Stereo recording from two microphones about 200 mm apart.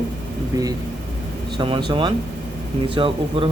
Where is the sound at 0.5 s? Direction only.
20° right (ahead or behind).